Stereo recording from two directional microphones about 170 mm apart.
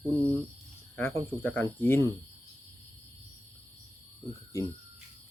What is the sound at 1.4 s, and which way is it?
Speech, 10° left (ahead or behind).